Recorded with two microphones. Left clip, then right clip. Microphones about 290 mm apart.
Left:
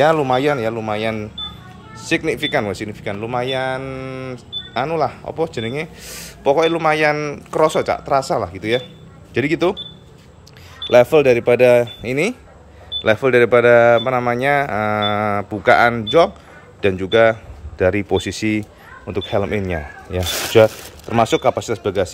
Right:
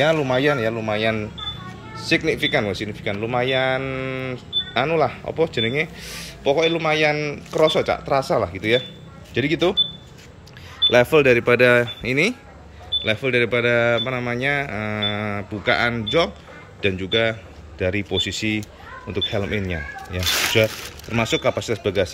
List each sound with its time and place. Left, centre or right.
0.0 s speech: centre
10.9 s a man's voice: centre